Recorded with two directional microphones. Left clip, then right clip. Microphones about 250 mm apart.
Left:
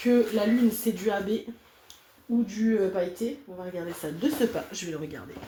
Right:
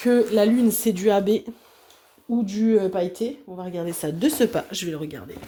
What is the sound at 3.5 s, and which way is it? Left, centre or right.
Speech, right.